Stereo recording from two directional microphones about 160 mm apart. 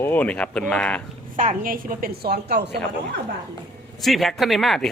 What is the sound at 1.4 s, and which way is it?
A woman's voice, 60° right (ahead or behind).